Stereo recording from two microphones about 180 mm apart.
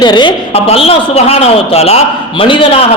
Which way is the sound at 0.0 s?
25° left (ahead or behind).